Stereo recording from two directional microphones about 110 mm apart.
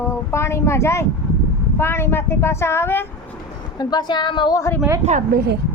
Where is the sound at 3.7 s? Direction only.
40° left (ahead or behind).